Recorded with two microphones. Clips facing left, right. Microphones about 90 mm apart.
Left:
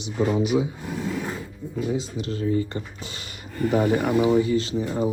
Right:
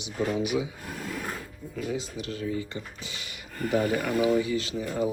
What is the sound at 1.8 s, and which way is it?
Speech, 25° left (ahead or behind).